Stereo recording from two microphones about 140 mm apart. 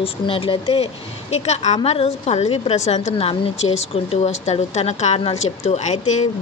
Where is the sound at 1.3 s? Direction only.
55° left (ahead or behind).